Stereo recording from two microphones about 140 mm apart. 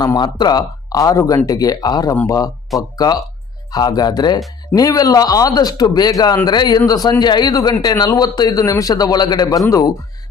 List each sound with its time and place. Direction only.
0.0 s speech: 30° left (ahead or behind)
2.7 s speech: centre (ahead or behind)
3.7 s speech: 30° left (ahead or behind)